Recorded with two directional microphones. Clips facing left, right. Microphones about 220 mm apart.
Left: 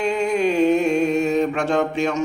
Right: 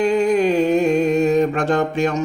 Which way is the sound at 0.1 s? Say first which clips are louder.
Right 4 dB; 35° right (ahead or behind).